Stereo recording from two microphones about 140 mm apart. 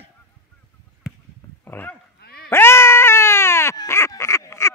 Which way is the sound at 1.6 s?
15° left (ahead or behind).